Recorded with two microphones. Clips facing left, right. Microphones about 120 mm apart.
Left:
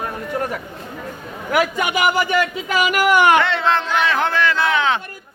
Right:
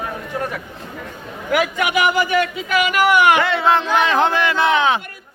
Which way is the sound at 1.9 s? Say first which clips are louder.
Right 1 dB; 35° left (ahead or behind).